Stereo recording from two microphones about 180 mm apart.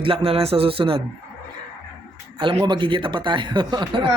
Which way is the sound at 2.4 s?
25° right (ahead or behind).